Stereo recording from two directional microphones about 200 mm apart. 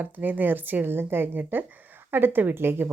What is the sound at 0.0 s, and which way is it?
A woman's voice, 10° right (ahead or behind).